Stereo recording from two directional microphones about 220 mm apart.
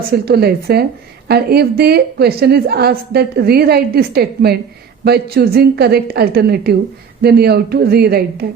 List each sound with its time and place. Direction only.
0.1 s a woman's voice: 45° right (ahead or behind)